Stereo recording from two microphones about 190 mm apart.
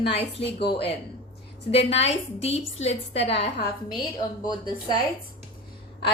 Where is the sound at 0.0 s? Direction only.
30° left (ahead or behind).